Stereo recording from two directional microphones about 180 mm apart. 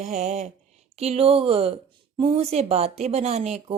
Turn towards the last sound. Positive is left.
turn(degrees=-35)  # may be behind; listen again after turning